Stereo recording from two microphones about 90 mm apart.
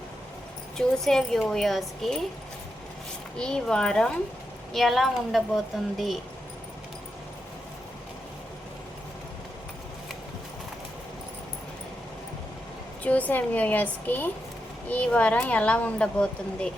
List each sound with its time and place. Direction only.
0.8 s speech: 5° left (ahead or behind)
3.3 s speech: 10° left (ahead or behind)
13.0 s speech: 15° left (ahead or behind)